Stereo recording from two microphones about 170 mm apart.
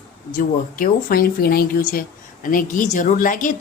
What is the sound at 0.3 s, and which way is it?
Speech, 55° left (ahead or behind).